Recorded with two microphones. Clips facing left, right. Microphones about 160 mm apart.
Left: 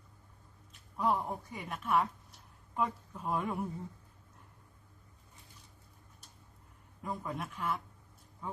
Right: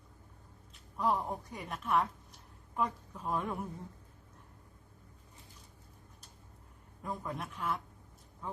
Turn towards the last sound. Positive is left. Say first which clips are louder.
# left 1 dB
turn(degrees=5)  # may be behind; listen again after turning